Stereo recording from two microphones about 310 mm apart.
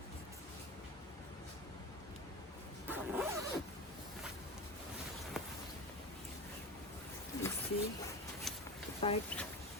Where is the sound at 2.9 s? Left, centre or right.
Centre.